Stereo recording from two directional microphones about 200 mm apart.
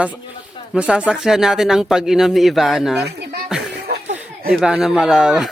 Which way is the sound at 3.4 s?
5° right (ahead or behind).